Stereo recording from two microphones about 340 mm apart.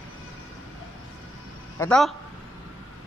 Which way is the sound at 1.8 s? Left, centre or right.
Centre.